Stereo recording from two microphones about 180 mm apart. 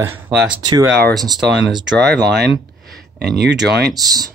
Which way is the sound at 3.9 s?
20° right (ahead or behind).